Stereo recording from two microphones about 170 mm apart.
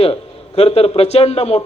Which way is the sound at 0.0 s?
35° left (ahead or behind).